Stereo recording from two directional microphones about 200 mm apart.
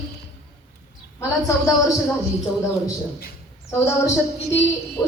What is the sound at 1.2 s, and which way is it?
Speech, 15° left (ahead or behind).